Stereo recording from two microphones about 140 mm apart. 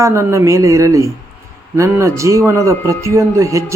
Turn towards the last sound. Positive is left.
turn(degrees=-20)  # may be behind; listen again after turning